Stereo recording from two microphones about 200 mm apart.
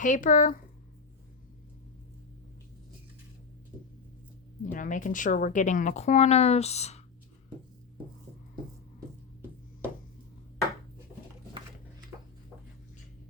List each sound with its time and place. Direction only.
0.0 s a woman's voice: 40° left (ahead or behind)
4.6 s a woman's voice: 40° left (ahead or behind)